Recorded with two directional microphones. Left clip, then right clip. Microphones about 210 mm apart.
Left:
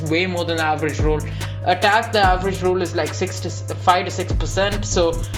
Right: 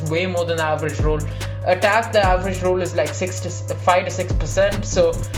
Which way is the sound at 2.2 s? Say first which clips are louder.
Even; 25° left (ahead or behind).